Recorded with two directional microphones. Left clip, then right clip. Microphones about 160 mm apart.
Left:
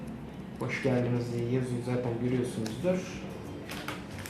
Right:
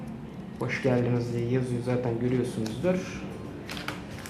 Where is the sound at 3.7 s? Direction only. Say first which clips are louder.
Right 3 dB; centre (ahead or behind).